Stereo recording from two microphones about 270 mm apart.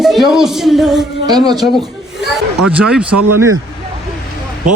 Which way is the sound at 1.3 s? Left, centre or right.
Centre.